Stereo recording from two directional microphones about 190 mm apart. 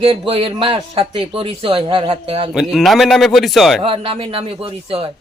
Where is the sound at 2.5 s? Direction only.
Centre (ahead or behind).